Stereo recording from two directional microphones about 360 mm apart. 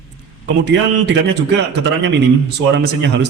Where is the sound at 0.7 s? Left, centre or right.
Right.